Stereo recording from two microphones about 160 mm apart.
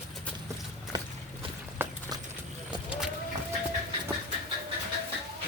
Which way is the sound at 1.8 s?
10° right (ahead or behind).